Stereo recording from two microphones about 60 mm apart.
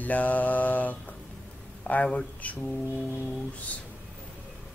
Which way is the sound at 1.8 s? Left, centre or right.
Left.